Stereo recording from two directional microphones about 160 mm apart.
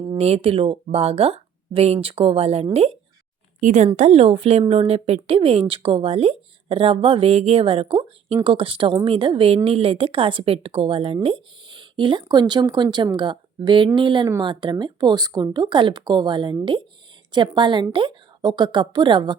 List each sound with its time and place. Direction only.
0.2 s speech: 40° right (ahead or behind)